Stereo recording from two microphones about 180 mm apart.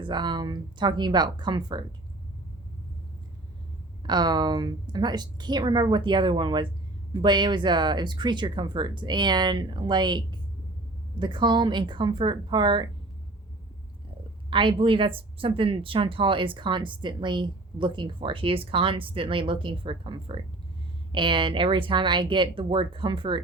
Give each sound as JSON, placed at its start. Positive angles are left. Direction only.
{"t": 0.0, "sound": "a woman's voice", "side_deg": -25}
{"t": 4.0, "sound": "a woman's voice", "side_deg": -25}
{"t": 14.5, "sound": "a woman's voice", "side_deg": -30}